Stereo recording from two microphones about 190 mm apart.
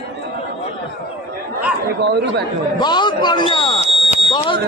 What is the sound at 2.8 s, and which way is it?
Speech, 25° left (ahead or behind).